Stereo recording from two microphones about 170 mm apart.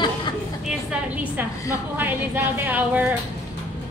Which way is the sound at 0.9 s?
10° right (ahead or behind).